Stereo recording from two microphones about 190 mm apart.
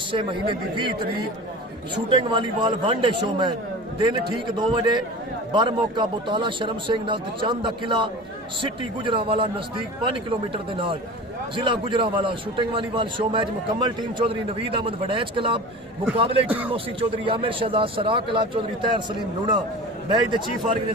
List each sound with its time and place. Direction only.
0.1 s a man's voice: 25° right (ahead or behind)
2.0 s a man's voice: 25° right (ahead or behind)
16.5 s speech: 10° right (ahead or behind)
16.7 s a man's voice: 30° right (ahead or behind)
20.1 s a man's voice: 25° right (ahead or behind)